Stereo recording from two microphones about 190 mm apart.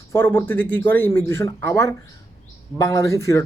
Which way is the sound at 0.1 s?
10° left (ahead or behind).